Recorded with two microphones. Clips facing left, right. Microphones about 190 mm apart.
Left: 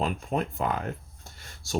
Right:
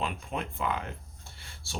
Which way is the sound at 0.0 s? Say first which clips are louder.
Left 6 dB; 40° left (ahead or behind).